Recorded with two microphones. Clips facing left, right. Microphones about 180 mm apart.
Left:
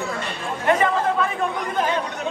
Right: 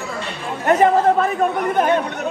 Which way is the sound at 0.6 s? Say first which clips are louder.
Right 6 dB; 45° right (ahead or behind).